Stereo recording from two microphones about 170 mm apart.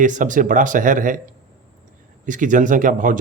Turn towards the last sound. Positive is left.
turn(degrees=-50)  # may be behind; listen again after turning